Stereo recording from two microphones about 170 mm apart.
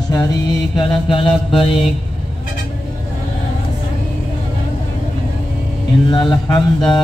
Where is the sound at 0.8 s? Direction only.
30° left (ahead or behind).